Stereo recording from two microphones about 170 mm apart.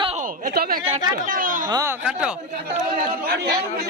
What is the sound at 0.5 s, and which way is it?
Speech, 65° right (ahead or behind).